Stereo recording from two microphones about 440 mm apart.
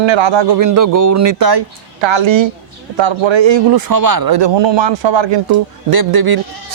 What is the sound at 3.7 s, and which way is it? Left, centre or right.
Speech, right.